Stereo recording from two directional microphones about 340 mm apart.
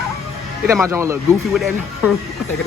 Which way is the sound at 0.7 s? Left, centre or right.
Centre.